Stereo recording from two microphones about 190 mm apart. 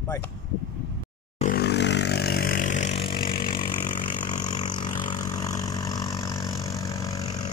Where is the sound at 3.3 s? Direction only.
25° left (ahead or behind).